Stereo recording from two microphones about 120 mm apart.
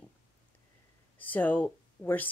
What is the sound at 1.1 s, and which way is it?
Speech, 15° left (ahead or behind).